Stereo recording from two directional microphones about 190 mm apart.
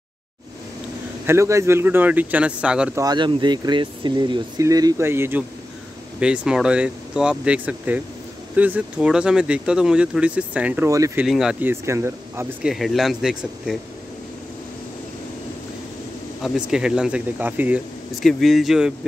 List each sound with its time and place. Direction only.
1.2 s speech: 15° right (ahead or behind)
3.0 s speech: 25° right (ahead or behind)
11.2 s speech: centre (ahead or behind)
11.7 s speech: 15° right (ahead or behind)
12.7 s speech: centre (ahead or behind)
16.4 s speech: 5° right (ahead or behind)